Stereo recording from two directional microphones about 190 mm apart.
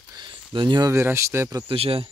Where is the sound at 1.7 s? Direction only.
30° right (ahead or behind).